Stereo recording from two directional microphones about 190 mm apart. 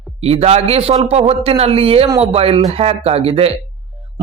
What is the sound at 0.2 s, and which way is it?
A man's voice, 30° right (ahead or behind).